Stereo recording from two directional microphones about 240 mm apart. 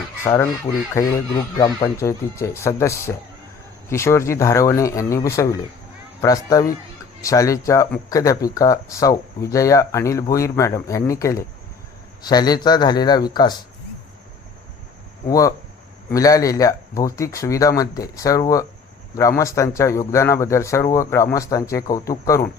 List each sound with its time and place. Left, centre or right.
0.3 s speech: centre
1.5 s speech: centre
15.3 s speech: centre